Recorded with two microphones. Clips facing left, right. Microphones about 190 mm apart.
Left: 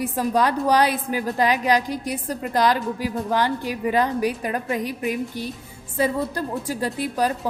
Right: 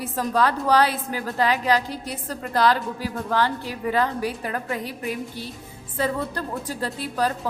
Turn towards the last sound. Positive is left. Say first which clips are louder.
# left 2 dB
turn(degrees=15)  # may be behind; listen again after turning